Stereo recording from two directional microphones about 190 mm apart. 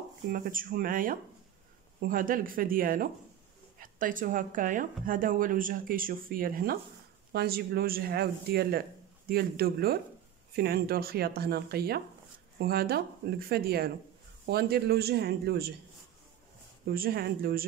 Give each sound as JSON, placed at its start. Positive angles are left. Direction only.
{"t": 0.3, "sound": "speech", "side_deg": -45}
{"t": 16.8, "sound": "speech", "side_deg": -50}